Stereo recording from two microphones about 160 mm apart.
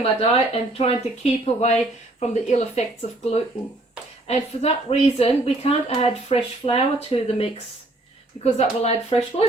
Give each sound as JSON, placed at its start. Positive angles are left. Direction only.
{"t": 0.0, "sound": "speech", "side_deg": 40}
{"t": 4.3, "sound": "speech", "side_deg": 40}
{"t": 8.5, "sound": "speech", "side_deg": 40}